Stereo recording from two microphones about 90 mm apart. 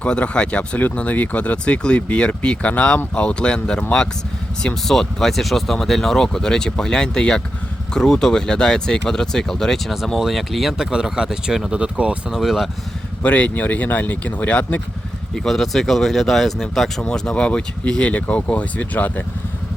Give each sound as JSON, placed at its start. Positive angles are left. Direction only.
{"t": 0.0, "sound": "speech", "side_deg": 10}
{"t": 13.2, "sound": "speech", "side_deg": 15}
{"t": 15.4, "sound": "speech", "side_deg": 5}